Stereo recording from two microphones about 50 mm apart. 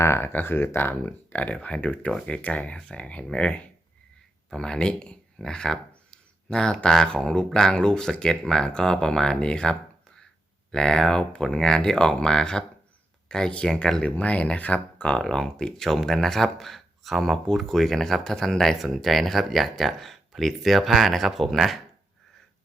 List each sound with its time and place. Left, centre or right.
0.0 s speech: left
0.3 s speech: left
1.5 s speech: left
15.1 s speech: centre